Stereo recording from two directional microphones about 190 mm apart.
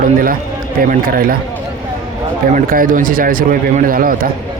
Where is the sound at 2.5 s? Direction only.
45° right (ahead or behind).